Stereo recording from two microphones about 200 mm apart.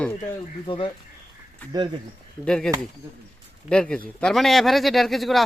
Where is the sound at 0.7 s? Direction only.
25° left (ahead or behind).